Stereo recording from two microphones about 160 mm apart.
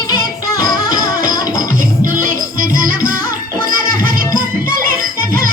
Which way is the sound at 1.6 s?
60° right (ahead or behind).